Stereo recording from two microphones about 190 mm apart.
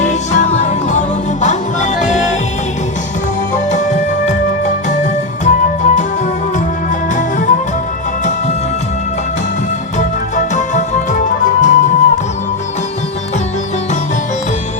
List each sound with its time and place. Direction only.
0.0 s music: 40° left (ahead or behind)
3.5 s music: 40° left (ahead or behind)
5.5 s music: 40° left (ahead or behind)
7.2 s music: 40° left (ahead or behind)
10.0 s music: 40° left (ahead or behind)